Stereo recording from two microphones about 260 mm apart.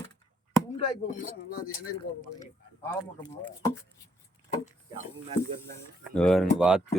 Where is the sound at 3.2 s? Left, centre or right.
Centre.